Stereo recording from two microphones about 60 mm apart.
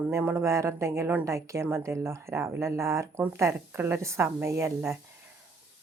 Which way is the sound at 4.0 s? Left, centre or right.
Right.